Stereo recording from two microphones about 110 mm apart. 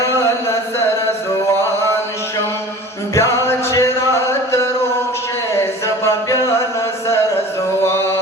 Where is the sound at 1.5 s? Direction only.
20° left (ahead or behind).